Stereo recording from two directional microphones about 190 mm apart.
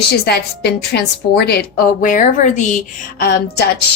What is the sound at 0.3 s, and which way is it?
A woman's voice, 60° left (ahead or behind).